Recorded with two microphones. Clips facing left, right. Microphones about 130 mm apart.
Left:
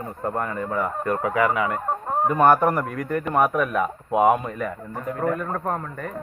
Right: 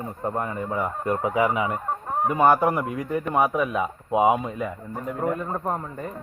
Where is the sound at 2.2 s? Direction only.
5° right (ahead or behind).